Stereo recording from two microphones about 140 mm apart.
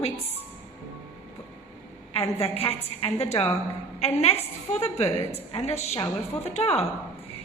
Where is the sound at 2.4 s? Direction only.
45° left (ahead or behind).